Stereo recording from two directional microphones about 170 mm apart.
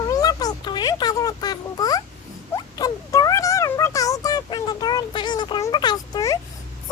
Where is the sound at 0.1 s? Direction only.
20° left (ahead or behind).